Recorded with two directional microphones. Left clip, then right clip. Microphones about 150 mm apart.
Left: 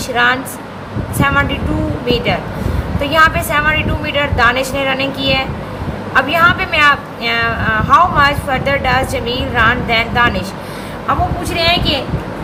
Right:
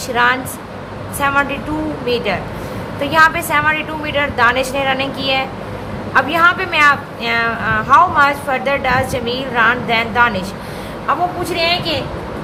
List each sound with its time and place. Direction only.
0.1 s a woman's voice: 20° right (ahead or behind)
11.5 s a woman's voice: 15° right (ahead or behind)